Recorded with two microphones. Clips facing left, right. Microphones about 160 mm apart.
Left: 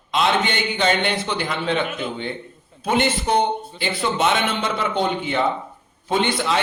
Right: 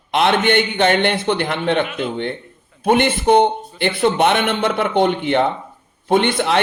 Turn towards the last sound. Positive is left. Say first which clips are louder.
# right 5 dB
turn(degrees=-60)  # may be behind; listen again after turning